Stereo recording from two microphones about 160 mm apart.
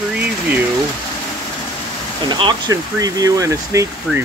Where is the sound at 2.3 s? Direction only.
25° right (ahead or behind).